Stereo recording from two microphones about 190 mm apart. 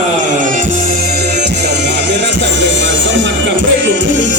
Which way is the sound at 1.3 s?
60° right (ahead or behind).